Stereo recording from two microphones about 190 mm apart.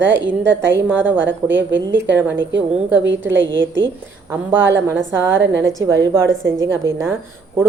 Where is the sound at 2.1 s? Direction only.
10° right (ahead or behind).